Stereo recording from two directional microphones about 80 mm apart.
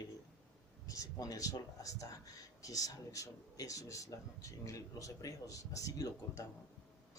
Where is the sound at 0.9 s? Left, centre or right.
Left.